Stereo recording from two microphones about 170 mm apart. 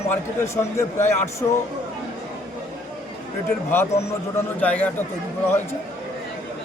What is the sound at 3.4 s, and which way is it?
A man's voice, 15° left (ahead or behind).